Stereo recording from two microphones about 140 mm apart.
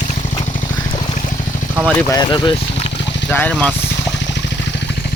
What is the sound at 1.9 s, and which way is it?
Speech, 25° left (ahead or behind).